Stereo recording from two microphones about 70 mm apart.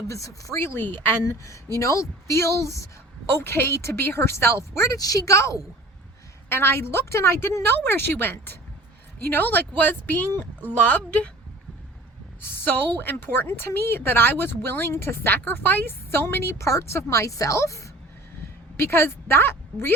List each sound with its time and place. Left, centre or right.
0.1 s speech: left
0.6 s a woman's voice: left
1.2 s speech: left
3.3 s a woman's voice: left
4.9 s speech: left
6.5 s a woman's voice: left
12.4 s a woman's voice: left
18.8 s a woman's voice: left